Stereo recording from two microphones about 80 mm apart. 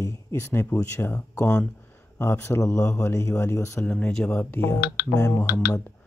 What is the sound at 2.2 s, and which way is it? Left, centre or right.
Speech, left.